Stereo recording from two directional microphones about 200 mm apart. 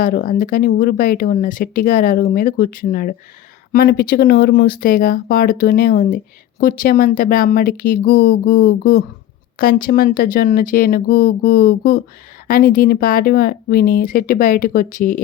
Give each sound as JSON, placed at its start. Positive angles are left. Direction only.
{"t": 0.0, "sound": "speech", "side_deg": 45}